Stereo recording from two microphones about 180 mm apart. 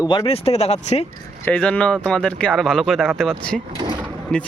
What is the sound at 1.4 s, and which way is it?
Speech, 10° left (ahead or behind).